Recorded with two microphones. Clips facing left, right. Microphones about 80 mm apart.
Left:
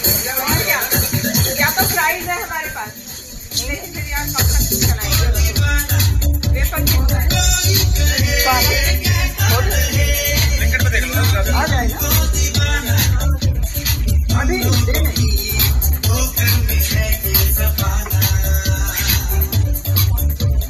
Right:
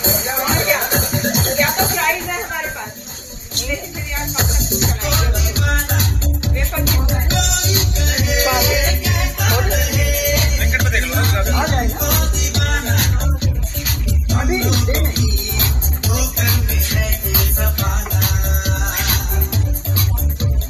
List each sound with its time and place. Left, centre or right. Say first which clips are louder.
0.0 s music: right 2 dB; right
4.6 s music: right 1 dB; right
11.5 s music: left 1 dB; left
12.0 s music: right 1 dB; right
14.3 s music: even; left
14.6 s music: even; right
16.3 s music: even; right